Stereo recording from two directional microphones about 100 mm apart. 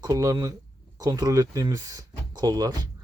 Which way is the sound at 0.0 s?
35° right (ahead or behind).